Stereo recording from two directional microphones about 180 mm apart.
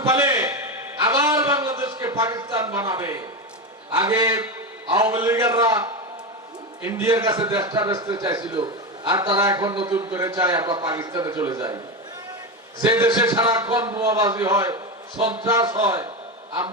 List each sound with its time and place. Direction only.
0.0 s a sound: 20° right (ahead or behind)
3.9 s a man's voice: 20° right (ahead or behind)
12.8 s a man's voice: 20° right (ahead or behind)